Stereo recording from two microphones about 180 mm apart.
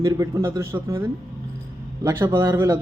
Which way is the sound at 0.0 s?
15° right (ahead or behind).